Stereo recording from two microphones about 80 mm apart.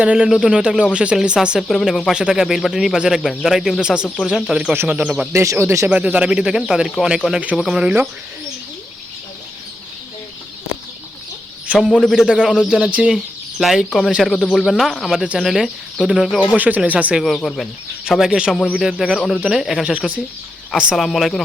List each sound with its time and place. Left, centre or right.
0.0 s speech: centre
3.8 s speech: centre
4.2 s speech: centre
5.3 s speech: right
5.9 s speech: centre
11.7 s speech: centre
12.0 s speech: centre
16.6 s speech: centre
17.2 s speech: centre
19.8 s speech: centre
20.9 s speech: centre